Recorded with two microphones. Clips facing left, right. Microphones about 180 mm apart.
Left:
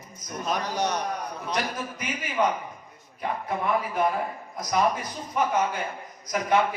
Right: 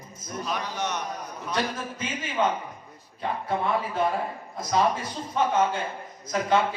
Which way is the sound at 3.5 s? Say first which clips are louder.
Even; 30° right (ahead or behind).